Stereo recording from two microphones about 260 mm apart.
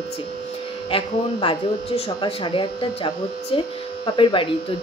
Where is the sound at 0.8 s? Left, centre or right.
Centre.